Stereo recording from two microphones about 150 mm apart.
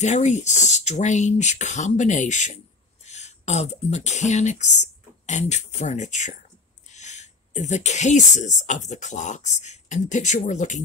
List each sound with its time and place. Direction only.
0.0 s speech: 50° left (ahead or behind)